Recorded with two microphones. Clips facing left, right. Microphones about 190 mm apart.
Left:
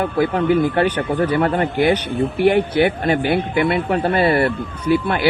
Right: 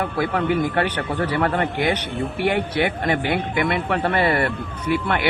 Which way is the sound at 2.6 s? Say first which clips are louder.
Left 5 dB; 30° left (ahead or behind).